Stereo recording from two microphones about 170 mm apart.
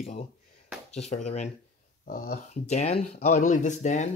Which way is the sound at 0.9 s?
40° left (ahead or behind).